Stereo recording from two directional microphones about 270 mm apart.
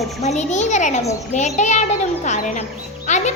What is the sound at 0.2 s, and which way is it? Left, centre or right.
A child's voice, left.